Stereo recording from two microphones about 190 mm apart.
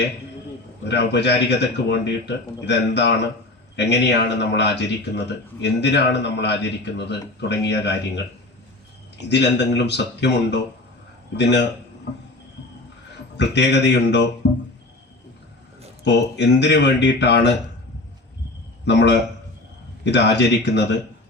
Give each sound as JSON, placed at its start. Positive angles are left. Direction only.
{"t": 0.9, "sound": "speech", "side_deg": 65}
{"t": 9.3, "sound": "speech", "side_deg": 65}
{"t": 13.3, "sound": "speech", "side_deg": 65}
{"t": 16.0, "sound": "speech", "side_deg": 65}
{"t": 18.9, "sound": "a man's voice", "side_deg": 65}